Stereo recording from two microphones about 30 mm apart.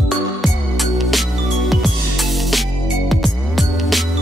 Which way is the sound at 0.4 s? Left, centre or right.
Centre.